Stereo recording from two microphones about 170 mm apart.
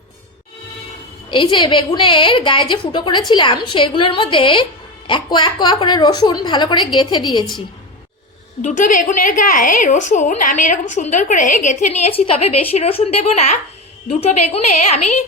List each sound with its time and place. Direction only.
1.3 s a woman's voice: 30° left (ahead or behind)
8.6 s a woman's voice: 45° left (ahead or behind)